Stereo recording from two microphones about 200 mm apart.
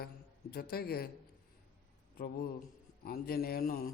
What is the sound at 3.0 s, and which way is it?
Speech, 50° left (ahead or behind).